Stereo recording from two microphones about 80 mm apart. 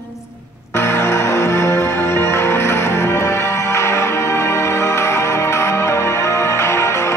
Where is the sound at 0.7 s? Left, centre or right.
Left.